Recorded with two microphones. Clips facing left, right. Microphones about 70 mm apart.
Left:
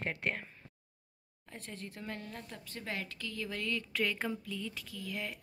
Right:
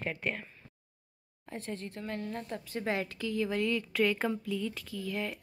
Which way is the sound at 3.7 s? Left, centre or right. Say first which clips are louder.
Right 6 dB; centre.